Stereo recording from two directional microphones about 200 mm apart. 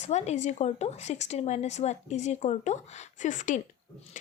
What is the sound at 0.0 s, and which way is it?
Speech, 35° left (ahead or behind).